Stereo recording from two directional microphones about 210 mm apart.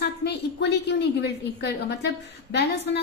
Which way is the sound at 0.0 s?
55° left (ahead or behind).